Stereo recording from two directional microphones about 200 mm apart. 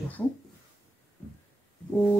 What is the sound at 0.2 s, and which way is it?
Speech, 10° left (ahead or behind).